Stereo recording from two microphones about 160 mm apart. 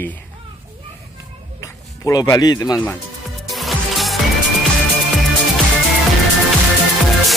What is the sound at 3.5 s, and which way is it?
Music, centre (ahead or behind).